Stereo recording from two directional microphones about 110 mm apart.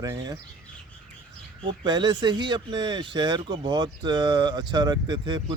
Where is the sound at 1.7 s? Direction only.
40° right (ahead or behind).